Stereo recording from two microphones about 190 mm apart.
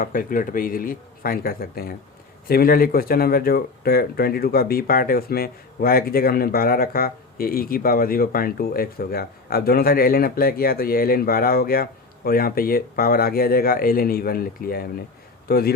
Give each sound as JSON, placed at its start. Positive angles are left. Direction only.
{"t": 0.0, "sound": "speech", "side_deg": 45}